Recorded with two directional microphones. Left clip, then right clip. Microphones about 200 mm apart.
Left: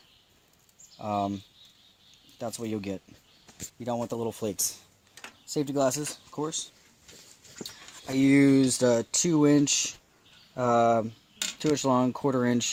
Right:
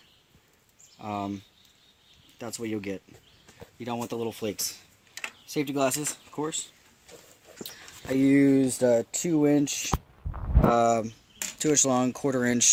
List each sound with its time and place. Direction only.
0.9 s speech: 40° left (ahead or behind)
2.4 s speech: 40° left (ahead or behind)
5.5 s speech: 30° left (ahead or behind)
8.0 s speech: 30° left (ahead or behind)